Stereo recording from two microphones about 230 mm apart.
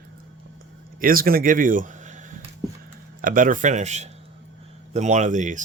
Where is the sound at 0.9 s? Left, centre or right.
Right.